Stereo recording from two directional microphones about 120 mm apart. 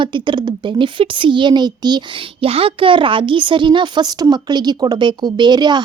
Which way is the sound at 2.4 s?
50° right (ahead or behind).